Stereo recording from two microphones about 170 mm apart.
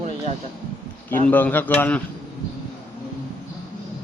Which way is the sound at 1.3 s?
10° left (ahead or behind).